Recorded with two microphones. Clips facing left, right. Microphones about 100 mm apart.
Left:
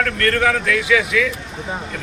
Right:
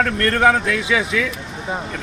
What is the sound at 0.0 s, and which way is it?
A man's voice, 25° right (ahead or behind).